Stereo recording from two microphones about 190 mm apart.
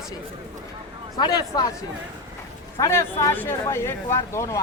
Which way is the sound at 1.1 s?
20° left (ahead or behind).